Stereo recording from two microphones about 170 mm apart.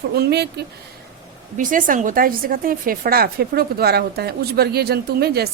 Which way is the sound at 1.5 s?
50° right (ahead or behind).